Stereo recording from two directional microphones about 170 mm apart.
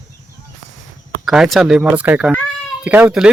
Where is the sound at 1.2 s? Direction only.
Centre (ahead or behind).